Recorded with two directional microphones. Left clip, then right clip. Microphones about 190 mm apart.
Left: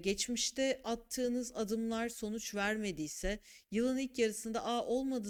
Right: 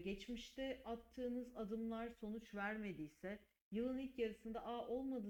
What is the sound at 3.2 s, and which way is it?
Speech, 40° left (ahead or behind).